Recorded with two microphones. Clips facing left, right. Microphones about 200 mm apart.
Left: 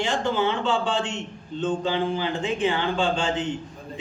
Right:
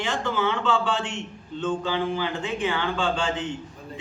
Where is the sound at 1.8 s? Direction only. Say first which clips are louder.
Left 1 dB; 20° left (ahead or behind).